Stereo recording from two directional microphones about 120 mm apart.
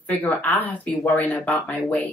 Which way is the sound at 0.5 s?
15° left (ahead or behind).